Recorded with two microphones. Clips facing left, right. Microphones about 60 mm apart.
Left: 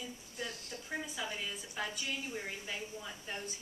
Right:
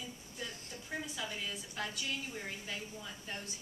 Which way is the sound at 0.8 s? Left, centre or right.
Centre.